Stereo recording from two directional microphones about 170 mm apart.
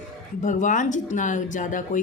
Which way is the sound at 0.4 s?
50° left (ahead or behind).